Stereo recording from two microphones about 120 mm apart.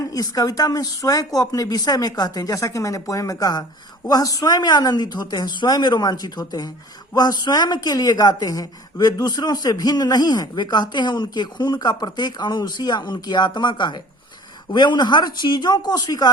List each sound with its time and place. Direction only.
0.1 s speech: 30° left (ahead or behind)